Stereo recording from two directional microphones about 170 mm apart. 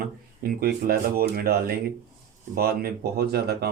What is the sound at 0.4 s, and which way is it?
Speech, 60° right (ahead or behind).